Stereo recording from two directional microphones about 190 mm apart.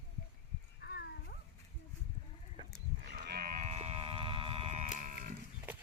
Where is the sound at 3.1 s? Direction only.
50° right (ahead or behind).